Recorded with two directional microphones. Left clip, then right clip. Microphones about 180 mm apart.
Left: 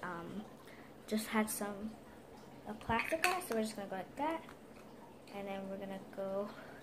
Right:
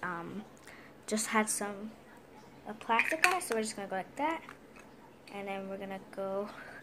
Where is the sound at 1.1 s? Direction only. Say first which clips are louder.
Right 6 dB; 35° right (ahead or behind).